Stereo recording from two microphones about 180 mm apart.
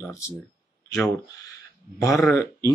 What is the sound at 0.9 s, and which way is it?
Speech, 15° left (ahead or behind).